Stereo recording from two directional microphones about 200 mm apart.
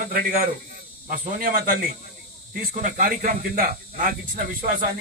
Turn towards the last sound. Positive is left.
turn(degrees=-45)  # may be behind; listen again after turning